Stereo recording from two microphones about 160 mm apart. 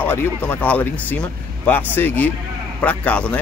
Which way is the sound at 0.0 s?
10° left (ahead or behind).